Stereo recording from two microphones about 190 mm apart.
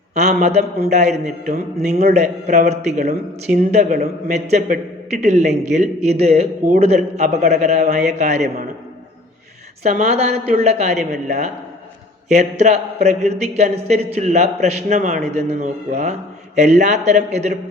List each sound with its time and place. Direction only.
0.1 s a man's voice: 35° right (ahead or behind)
9.8 s a man's voice: 35° right (ahead or behind)